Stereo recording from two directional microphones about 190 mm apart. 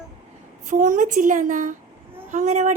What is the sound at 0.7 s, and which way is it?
A woman's voice, 45° right (ahead or behind).